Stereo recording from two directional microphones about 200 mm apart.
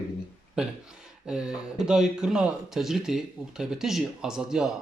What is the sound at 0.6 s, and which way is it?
Speech, 5° right (ahead or behind).